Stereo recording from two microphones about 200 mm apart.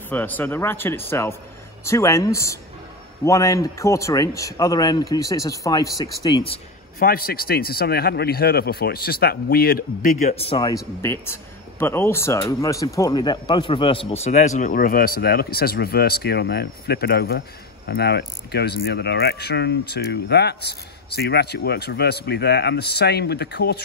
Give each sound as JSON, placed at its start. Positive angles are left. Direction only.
{"t": 0.1, "sound": "a man's voice", "side_deg": 10}
{"t": 7.0, "sound": "speech", "side_deg": 45}
{"t": 10.2, "sound": "a man's voice", "side_deg": 30}
{"t": 10.7, "sound": "a man's voice", "side_deg": 15}